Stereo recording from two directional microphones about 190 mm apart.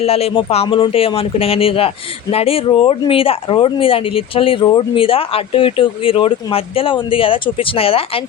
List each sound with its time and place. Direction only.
0.0 s speech: 30° left (ahead or behind)